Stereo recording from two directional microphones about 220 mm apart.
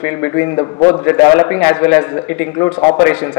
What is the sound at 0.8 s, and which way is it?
A man's voice, 15° left (ahead or behind).